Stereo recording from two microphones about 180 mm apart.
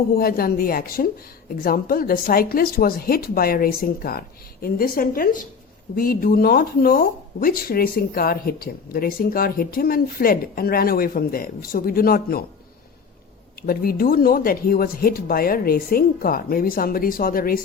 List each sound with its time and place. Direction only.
0.1 s speech: 55° left (ahead or behind)
13.6 s speech: 55° left (ahead or behind)